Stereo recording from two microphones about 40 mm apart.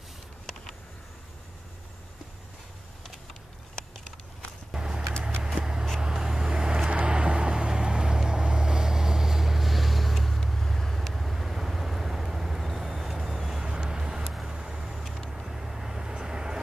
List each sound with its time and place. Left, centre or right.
4.7 s vehicle: centre
5.5 s a sound: right
5.9 s vehicle: centre
13.7 s vehicle: centre